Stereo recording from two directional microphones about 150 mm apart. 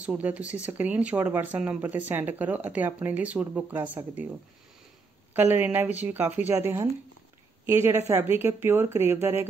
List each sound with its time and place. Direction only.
0.0 s speech: 10° right (ahead or behind)
5.3 s speech: 10° right (ahead or behind)